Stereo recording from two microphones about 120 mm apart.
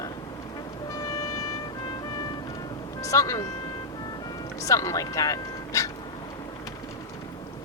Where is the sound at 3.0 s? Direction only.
25° left (ahead or behind).